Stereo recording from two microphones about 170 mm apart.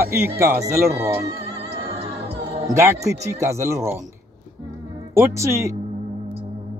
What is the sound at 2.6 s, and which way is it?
Speech, 15° right (ahead or behind).